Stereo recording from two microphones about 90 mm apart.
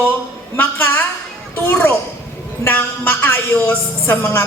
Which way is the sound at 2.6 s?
20° left (ahead or behind).